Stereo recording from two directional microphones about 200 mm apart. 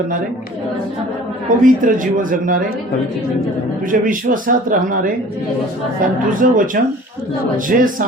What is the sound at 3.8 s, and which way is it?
A man's voice, 40° right (ahead or behind).